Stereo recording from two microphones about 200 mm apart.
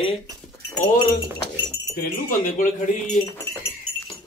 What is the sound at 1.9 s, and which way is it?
Speech, 40° left (ahead or behind).